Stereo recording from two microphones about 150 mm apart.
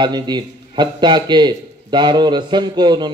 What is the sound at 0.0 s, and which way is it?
A man's voice, 30° right (ahead or behind).